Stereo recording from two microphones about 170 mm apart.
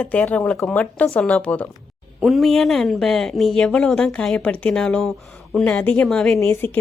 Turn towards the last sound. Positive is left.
turn(degrees=5)  # may be behind; listen again after turning